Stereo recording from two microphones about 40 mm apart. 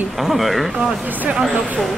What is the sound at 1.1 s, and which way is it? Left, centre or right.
Speech, right.